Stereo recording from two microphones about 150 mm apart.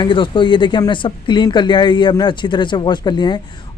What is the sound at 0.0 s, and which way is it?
Speech, 35° left (ahead or behind).